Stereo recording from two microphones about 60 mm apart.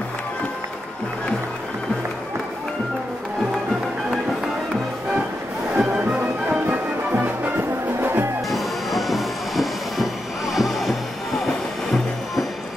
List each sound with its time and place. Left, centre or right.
5.8 s music: centre
6.7 s music: right
8.5 s music: centre